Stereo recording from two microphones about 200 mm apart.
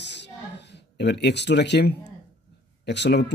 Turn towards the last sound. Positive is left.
turn(degrees=60)  # may be behind; listen again after turning